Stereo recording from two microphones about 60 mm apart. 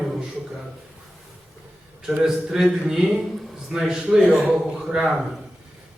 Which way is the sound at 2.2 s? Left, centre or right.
Centre.